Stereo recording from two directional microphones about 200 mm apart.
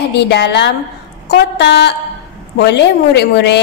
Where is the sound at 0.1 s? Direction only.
55° left (ahead or behind).